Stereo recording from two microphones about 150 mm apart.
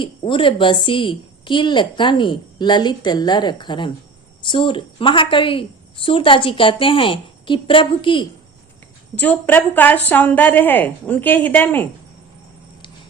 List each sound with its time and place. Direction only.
0.0 s a woman's voice: 35° left (ahead or behind)
9.1 s a woman's voice: 10° left (ahead or behind)